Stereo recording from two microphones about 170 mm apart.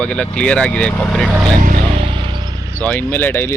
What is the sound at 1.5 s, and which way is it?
Vehicle, 50° right (ahead or behind).